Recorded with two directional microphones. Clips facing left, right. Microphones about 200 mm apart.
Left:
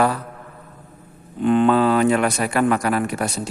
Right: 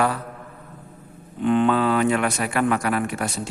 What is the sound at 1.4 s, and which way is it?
A man's voice, 40° left (ahead or behind).